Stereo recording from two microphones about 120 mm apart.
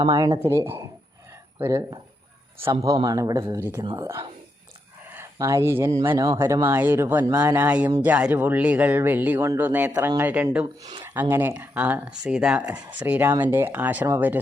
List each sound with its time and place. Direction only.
0.0 s speech: 35° right (ahead or behind)
2.8 s speech: 30° right (ahead or behind)
3.6 s speech: 20° right (ahead or behind)
5.1 s speech: 25° right (ahead or behind)